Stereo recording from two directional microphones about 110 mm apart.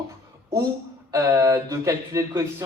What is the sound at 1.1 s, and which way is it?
A man's voice, 30° right (ahead or behind).